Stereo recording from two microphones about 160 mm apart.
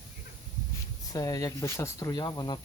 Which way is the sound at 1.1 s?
25° left (ahead or behind).